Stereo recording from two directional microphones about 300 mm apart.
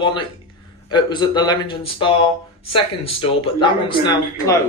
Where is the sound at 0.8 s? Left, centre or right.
Centre.